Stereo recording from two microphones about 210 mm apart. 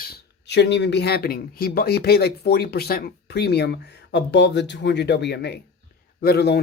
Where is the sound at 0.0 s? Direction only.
50° left (ahead or behind).